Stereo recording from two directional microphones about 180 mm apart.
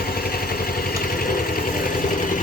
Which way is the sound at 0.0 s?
55° left (ahead or behind).